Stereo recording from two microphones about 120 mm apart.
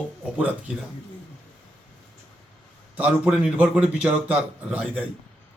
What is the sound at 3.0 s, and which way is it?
A man's voice, 10° right (ahead or behind).